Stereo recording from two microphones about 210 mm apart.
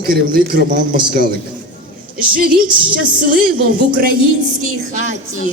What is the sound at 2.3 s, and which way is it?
Speech, 45° right (ahead or behind).